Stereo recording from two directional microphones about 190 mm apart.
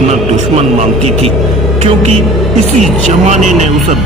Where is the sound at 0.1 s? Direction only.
35° right (ahead or behind).